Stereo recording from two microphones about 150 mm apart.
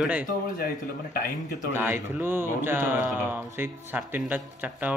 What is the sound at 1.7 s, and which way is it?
A man's voice, 15° right (ahead or behind).